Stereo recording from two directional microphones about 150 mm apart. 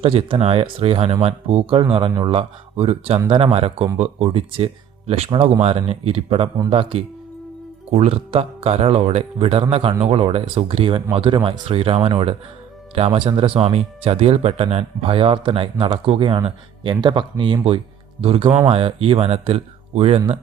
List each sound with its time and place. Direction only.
0.0 s speech: 40° right (ahead or behind)